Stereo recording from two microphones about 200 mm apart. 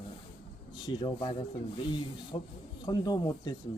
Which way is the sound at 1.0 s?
25° left (ahead or behind).